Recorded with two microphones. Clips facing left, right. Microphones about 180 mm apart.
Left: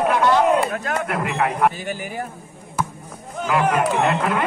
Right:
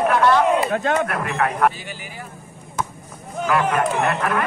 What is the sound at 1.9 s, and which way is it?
Speech, 50° left (ahead or behind).